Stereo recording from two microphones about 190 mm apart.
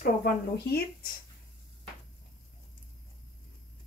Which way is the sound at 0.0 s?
55° left (ahead or behind).